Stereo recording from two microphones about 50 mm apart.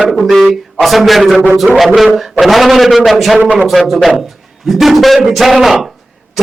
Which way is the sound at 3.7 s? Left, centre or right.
Centre.